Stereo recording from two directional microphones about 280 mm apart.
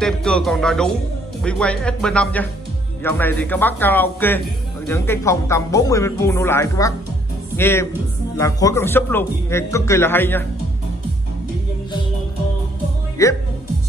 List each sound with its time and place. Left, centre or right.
0.0 s speech: centre
13.2 s a woman's voice: centre